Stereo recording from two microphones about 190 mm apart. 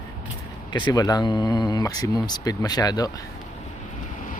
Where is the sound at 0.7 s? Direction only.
20° left (ahead or behind).